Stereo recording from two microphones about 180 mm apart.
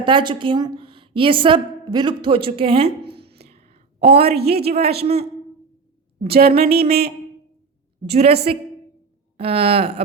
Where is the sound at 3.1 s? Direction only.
65° right (ahead or behind).